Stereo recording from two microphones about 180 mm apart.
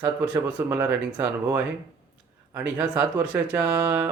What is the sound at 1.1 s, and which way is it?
Speech, 20° right (ahead or behind).